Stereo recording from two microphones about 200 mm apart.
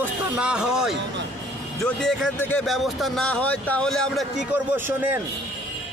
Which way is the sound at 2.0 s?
5° left (ahead or behind).